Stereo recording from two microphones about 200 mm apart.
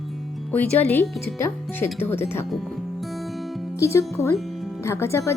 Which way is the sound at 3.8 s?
15° left (ahead or behind).